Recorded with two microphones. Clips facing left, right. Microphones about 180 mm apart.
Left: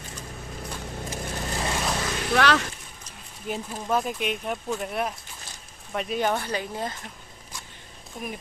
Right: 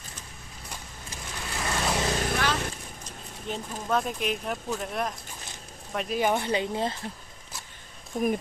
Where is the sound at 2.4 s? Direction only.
85° left.